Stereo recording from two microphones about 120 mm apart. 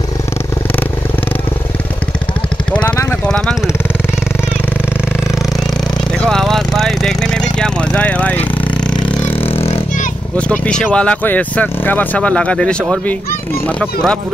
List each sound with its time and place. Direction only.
3.3 s vehicle: 5° left (ahead or behind)
6.2 s a sound: 5° left (ahead or behind)
9.5 s vehicle: 55° left (ahead or behind)
10.3 s speech: 10° left (ahead or behind)